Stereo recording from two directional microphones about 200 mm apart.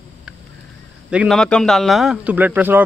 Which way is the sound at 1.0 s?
5° right (ahead or behind).